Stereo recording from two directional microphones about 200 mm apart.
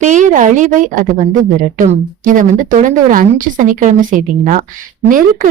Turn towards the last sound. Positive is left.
turn(degrees=-45)  # may be behind; listen again after turning